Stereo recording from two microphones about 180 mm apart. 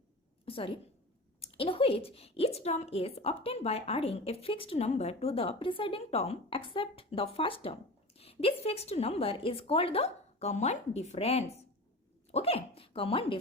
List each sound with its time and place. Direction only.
0.4 s a woman's voice: 30° left (ahead or behind)